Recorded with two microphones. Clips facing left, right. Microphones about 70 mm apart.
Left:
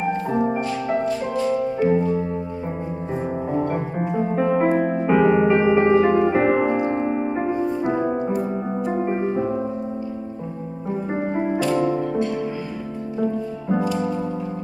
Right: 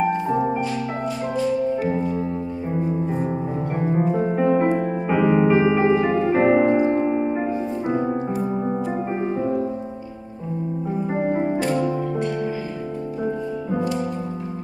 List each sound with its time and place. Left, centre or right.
3.5 s music: centre
11.1 s music: centre